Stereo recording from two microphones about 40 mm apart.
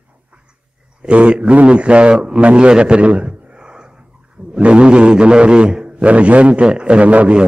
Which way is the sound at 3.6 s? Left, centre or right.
Right.